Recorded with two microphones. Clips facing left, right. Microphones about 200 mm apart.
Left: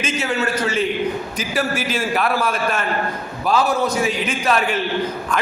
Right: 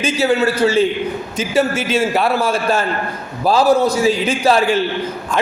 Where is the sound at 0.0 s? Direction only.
35° right (ahead or behind).